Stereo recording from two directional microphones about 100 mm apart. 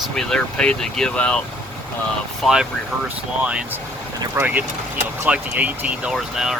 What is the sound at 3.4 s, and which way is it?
Speech, 10° right (ahead or behind).